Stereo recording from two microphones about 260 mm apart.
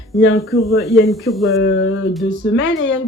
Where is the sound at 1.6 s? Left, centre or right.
Left.